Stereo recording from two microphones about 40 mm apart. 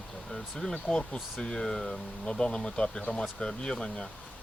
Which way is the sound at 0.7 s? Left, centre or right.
Left.